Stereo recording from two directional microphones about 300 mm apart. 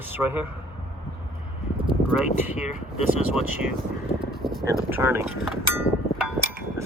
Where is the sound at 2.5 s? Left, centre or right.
Left.